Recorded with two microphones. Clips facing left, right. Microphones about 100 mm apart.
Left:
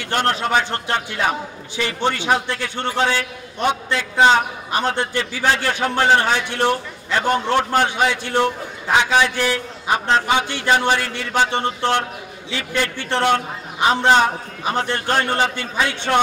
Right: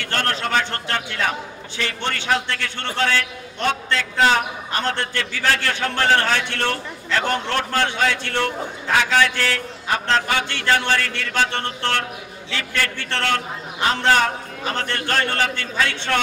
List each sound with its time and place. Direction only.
0.0 s a man's voice: 15° left (ahead or behind)